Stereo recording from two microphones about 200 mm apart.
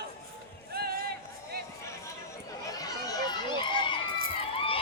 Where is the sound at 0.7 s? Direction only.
50° right (ahead or behind).